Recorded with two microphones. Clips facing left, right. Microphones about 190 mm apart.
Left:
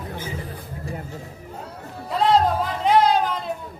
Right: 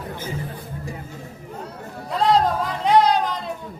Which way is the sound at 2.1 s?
Centre (ahead or behind).